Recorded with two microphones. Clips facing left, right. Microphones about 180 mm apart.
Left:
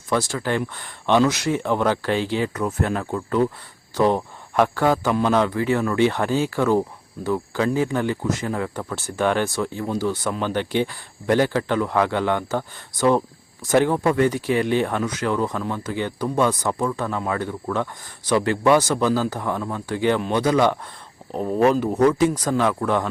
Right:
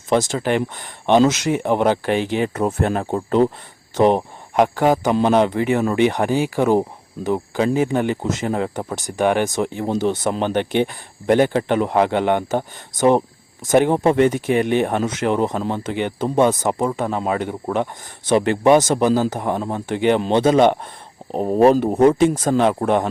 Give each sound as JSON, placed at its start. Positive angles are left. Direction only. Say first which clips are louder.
{"t": 0.1, "sound": "speech", "louder": "right 4 dB", "side_deg": -20}